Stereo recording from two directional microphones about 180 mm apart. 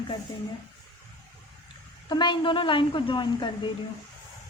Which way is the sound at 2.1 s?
25° left (ahead or behind).